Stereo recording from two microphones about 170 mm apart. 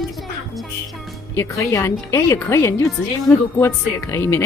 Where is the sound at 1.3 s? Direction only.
20° left (ahead or behind).